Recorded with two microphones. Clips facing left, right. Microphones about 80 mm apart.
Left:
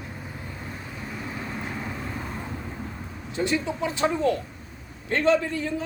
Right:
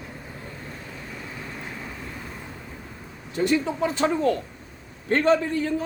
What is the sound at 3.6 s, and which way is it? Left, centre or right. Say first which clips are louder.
A man's voice: right 2 dB; right.